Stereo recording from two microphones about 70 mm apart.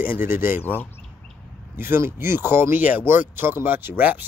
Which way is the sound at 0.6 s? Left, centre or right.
Left.